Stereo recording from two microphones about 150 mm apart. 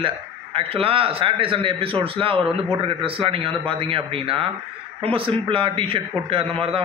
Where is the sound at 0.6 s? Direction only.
40° right (ahead or behind).